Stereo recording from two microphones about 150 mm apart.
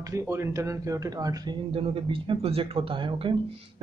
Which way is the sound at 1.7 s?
40° right (ahead or behind).